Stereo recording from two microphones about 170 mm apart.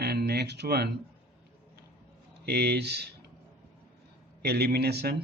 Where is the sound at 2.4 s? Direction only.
70° right (ahead or behind).